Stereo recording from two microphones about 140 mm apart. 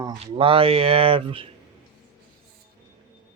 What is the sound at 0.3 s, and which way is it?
Speech, 40° right (ahead or behind).